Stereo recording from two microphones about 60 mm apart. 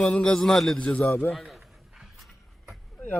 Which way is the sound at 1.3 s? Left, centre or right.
Centre.